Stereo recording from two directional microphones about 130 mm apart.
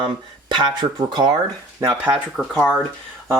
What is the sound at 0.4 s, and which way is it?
Speech, 35° right (ahead or behind).